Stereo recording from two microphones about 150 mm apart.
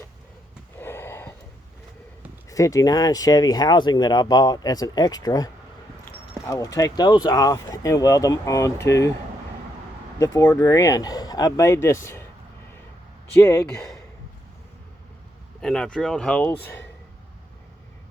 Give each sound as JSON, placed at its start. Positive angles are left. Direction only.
{"t": 0.8, "sound": "a sound", "side_deg": 15}
{"t": 2.5, "sound": "speech", "side_deg": 20}
{"t": 10.2, "sound": "speech", "side_deg": 25}
{"t": 13.3, "sound": "speech", "side_deg": 15}
{"t": 15.6, "sound": "speech", "side_deg": 5}